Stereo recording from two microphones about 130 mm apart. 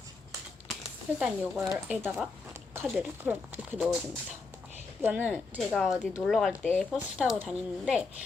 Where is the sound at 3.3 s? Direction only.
15° right (ahead or behind).